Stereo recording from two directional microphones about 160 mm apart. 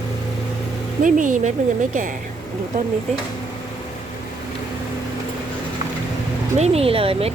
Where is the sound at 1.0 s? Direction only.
55° right (ahead or behind).